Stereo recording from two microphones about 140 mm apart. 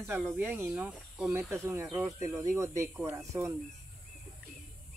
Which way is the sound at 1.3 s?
20° right (ahead or behind).